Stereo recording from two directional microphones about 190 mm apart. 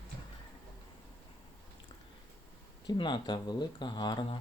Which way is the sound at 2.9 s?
25° left (ahead or behind).